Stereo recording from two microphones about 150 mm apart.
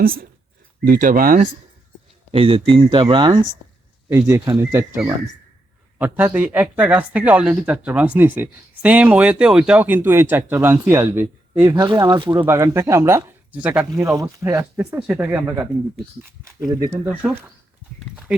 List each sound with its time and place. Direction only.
0.0 s speech: 75° right (ahead or behind)
2.3 s speech: 40° right (ahead or behind); by 11.9 s 15° right (ahead or behind)
11.9 s speech: 30° right (ahead or behind)
12.4 s speech: 20° right (ahead or behind)
13.9 s speech: 20° right (ahead or behind)
14.6 s speech: 10° right (ahead or behind)
16.4 s speech: 25° right (ahead or behind); by 18.3 s 5° right (ahead or behind)